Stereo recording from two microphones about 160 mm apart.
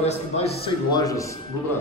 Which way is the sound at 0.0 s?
40° left (ahead or behind).